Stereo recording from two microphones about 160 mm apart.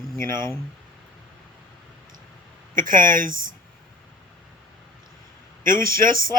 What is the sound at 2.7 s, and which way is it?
Speech, 55° right (ahead or behind).